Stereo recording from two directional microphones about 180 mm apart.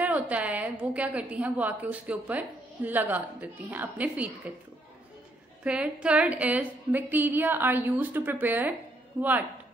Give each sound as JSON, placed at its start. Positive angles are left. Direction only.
{"t": 0.0, "sound": "a woman's voice", "side_deg": -10}
{"t": 5.6, "sound": "a woman's voice", "side_deg": -5}